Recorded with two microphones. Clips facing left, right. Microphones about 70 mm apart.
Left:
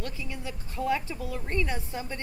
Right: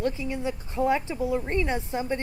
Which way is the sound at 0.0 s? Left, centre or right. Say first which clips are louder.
Right 9 dB; right.